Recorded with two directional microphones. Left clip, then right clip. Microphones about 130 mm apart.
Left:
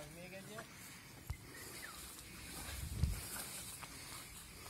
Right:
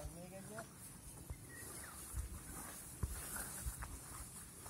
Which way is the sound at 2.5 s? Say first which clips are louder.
Left 3 dB; 10° left (ahead or behind).